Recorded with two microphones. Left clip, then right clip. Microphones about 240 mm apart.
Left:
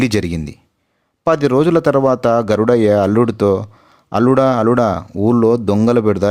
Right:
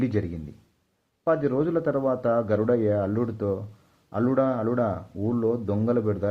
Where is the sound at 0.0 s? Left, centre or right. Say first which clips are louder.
Left 11 dB; left.